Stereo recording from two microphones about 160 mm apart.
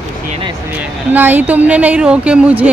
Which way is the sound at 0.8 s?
10° right (ahead or behind).